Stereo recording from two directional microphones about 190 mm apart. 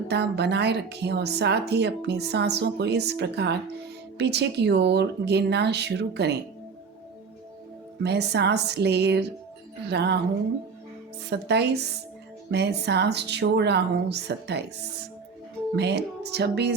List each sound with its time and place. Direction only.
0.1 s speech: 60° right (ahead or behind)
8.0 s speech: 60° right (ahead or behind)
11.3 s speech: 60° right (ahead or behind)